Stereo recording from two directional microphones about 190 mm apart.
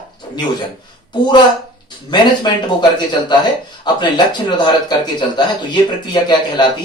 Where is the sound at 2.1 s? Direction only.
25° left (ahead or behind).